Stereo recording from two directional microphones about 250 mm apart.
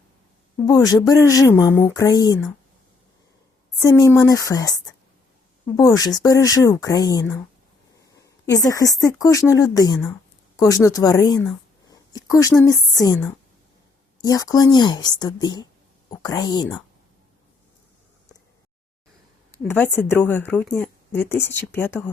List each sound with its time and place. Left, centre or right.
0.6 s a woman's voice: centre
3.8 s a woman's voice: centre
8.2 s a sound: centre
8.7 s a woman's voice: centre
11.9 s a sound: centre
12.6 s a woman's voice: centre
19.5 s a woman's voice: centre